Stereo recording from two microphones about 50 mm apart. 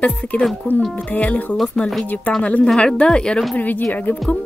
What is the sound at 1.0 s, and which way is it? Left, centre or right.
Speech, left.